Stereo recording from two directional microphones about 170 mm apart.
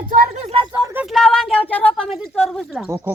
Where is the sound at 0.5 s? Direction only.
25° right (ahead or behind).